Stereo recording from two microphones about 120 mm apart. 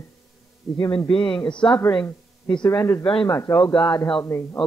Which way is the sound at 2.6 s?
25° left (ahead or behind).